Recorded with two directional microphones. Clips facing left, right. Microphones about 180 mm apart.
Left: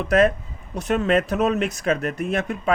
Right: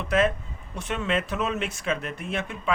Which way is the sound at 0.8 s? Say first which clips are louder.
Left 7 dB; 40° left (ahead or behind).